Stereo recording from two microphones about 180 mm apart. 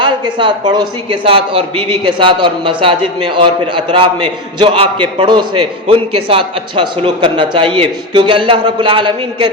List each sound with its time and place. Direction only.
0.0 s a man's voice: 25° right (ahead or behind)